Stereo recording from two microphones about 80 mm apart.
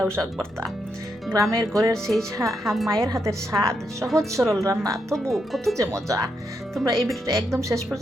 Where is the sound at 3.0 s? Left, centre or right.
Right.